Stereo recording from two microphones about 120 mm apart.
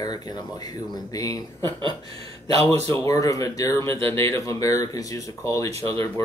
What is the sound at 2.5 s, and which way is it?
Speech, 60° right (ahead or behind).